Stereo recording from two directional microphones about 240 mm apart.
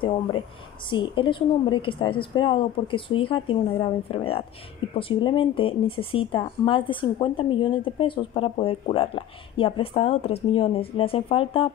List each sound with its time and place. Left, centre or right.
0.8 s speech: left